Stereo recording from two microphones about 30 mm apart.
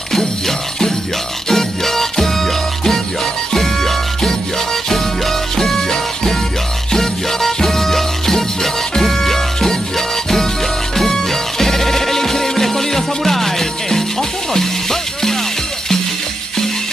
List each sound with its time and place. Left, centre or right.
0.5 s music: centre
5.6 s music: centre